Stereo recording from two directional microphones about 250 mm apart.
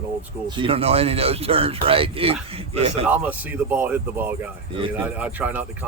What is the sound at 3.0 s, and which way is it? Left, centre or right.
Speech, centre.